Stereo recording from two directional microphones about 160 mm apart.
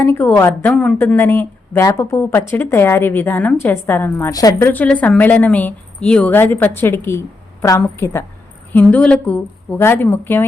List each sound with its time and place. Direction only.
0.0 s speech: 10° left (ahead or behind)
4.7 s speech: 10° left (ahead or behind)